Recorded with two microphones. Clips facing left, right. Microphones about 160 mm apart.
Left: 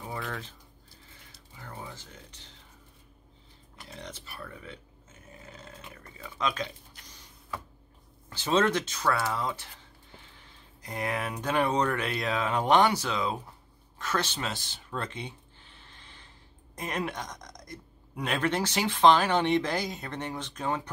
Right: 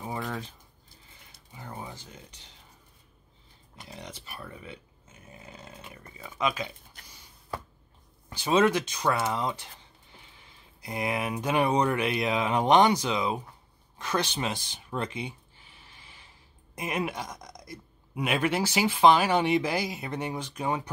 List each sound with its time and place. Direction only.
1.6 s speech: 15° right (ahead or behind)
3.9 s speech: 15° right (ahead or behind)
5.5 s a sound: 15° right (ahead or behind)
8.3 s speech: 15° right (ahead or behind)
10.8 s speech: 10° right (ahead or behind)
13.9 s a sound: 15° right (ahead or behind)
16.7 s speech: 10° right (ahead or behind)